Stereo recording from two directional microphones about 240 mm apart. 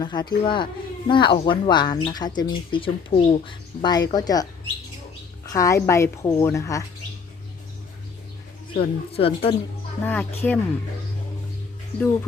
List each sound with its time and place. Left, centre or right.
0.0 s speech: centre
5.5 s speech: centre
8.8 s speech: left
10.0 s speech: centre